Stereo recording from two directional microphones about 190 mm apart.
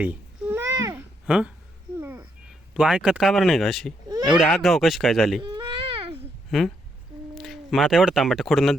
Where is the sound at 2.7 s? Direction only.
5° right (ahead or behind).